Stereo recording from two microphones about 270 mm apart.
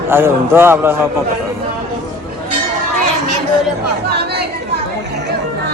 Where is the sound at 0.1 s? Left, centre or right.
Centre.